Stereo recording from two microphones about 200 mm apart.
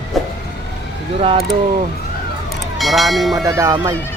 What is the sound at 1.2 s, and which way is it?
Speech, 30° right (ahead or behind).